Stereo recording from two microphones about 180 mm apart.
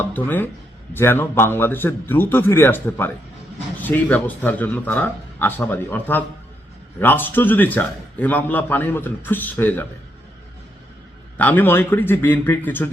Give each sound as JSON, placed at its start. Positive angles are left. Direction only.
{"t": 0.0, "sound": "a man's voice", "side_deg": 10}
{"t": 11.3, "sound": "a man's voice", "side_deg": 10}